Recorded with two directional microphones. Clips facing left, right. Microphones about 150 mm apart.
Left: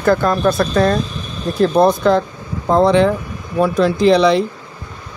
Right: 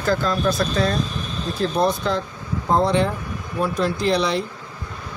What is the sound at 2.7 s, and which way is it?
Speech, 90° left.